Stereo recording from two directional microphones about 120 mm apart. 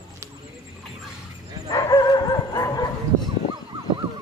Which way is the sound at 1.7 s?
30° left (ahead or behind).